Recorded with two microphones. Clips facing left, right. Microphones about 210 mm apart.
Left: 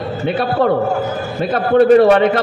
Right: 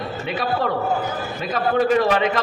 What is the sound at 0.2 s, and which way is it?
A man's voice, 30° left (ahead or behind).